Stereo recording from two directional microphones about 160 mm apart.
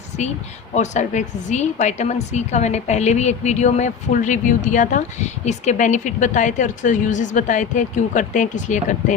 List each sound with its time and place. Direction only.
0.7 s a woman's voice: 50° left (ahead or behind)